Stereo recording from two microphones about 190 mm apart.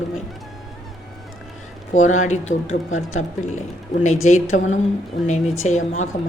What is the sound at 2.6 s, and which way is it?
Speech, 90° left.